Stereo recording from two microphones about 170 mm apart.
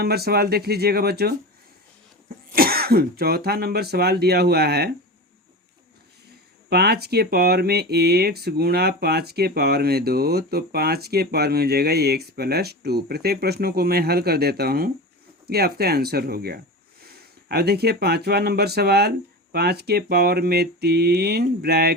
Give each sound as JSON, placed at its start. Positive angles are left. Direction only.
{"t": 0.0, "sound": "speech", "side_deg": -65}
{"t": 2.6, "sound": "speech", "side_deg": -60}
{"t": 6.7, "sound": "speech", "side_deg": -70}